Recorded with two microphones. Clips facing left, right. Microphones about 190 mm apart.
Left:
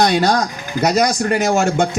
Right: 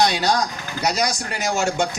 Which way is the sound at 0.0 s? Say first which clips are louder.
Left 5 dB; 55° left (ahead or behind).